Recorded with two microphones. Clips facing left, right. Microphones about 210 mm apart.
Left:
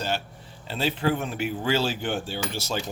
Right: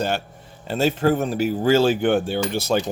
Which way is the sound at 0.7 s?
45° right (ahead or behind).